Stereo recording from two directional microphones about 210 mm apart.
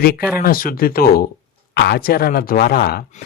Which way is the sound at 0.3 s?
45° left (ahead or behind).